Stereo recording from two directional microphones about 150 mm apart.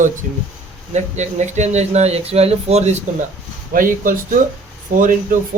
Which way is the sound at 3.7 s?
65° right (ahead or behind).